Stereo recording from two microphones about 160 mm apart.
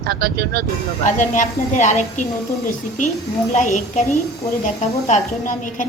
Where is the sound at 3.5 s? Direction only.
45° left (ahead or behind).